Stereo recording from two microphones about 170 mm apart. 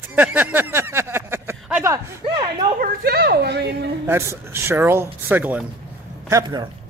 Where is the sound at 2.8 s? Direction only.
65° right (ahead or behind).